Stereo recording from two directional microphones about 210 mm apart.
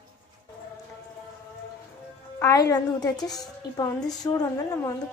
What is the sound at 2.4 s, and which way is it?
A woman's voice, 15° left (ahead or behind).